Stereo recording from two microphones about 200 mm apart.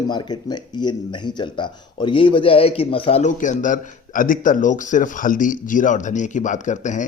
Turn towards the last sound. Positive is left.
turn(degrees=40)  # may be behind; listen again after turning